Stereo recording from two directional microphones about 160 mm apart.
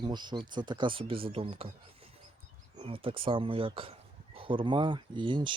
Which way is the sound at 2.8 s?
35° right (ahead or behind).